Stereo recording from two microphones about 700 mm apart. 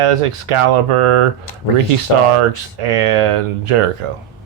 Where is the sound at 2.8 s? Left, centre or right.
Right.